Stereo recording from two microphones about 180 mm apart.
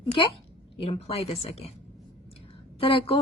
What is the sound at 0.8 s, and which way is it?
Speech, 35° left (ahead or behind).